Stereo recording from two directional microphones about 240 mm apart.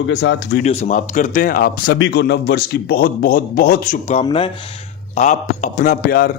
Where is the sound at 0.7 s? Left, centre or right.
Left.